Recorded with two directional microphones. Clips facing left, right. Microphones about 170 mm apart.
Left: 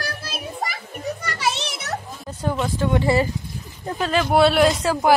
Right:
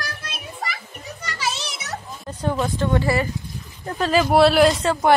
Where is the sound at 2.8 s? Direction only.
15° left (ahead or behind).